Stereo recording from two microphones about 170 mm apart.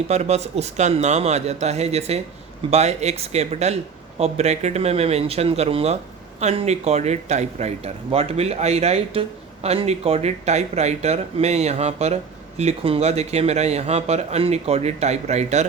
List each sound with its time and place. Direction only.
0.1 s speech: 40° right (ahead or behind)